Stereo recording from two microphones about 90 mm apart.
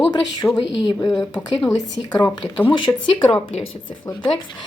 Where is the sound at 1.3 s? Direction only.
40° left (ahead or behind).